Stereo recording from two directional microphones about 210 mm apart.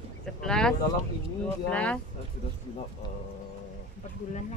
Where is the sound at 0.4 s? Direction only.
5° left (ahead or behind).